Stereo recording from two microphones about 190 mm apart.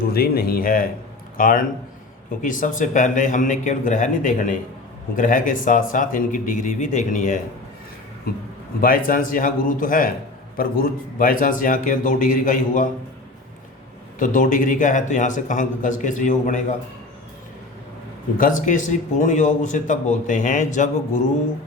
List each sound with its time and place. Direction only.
0.1 s speech: 50° left (ahead or behind)
8.8 s speech: 45° left (ahead or behind)
14.2 s speech: 45° left (ahead or behind)
18.3 s speech: 45° left (ahead or behind)